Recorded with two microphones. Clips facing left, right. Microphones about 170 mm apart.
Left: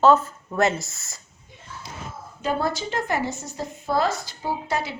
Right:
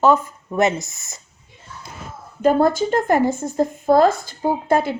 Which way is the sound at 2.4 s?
50° right (ahead or behind).